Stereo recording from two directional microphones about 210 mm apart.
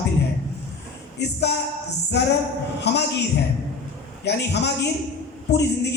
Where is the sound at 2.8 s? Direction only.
55° left (ahead or behind).